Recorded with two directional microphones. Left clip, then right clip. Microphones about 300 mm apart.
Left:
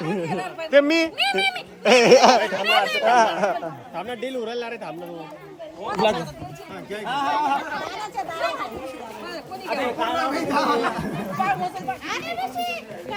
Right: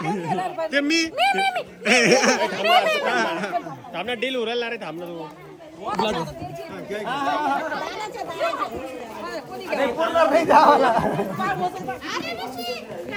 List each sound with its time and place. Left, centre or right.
0.1 s speech: centre
4.5 s a man's voice: right
6.9 s speech: centre
10.2 s speech: centre